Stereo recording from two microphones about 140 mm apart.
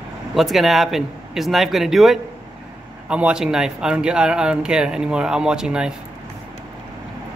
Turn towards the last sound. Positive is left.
turn(degrees=-5)  # may be behind; listen again after turning